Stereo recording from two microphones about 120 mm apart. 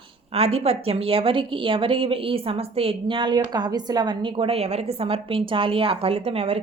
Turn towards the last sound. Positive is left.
turn(degrees=-55)  # may be behind; listen again after turning